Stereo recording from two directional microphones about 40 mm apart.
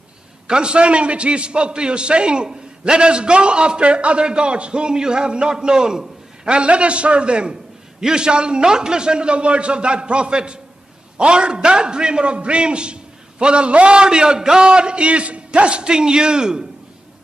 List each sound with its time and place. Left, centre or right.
0.5 s a man's voice: right